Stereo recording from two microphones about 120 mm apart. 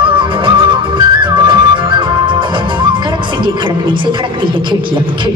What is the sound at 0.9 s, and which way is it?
Music, 40° right (ahead or behind).